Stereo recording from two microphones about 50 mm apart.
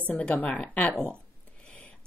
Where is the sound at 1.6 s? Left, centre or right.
Left.